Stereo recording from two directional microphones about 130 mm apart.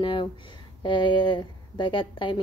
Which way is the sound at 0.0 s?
40° left (ahead or behind).